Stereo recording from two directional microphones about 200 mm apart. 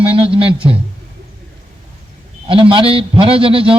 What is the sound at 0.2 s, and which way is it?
Speech, 25° right (ahead or behind).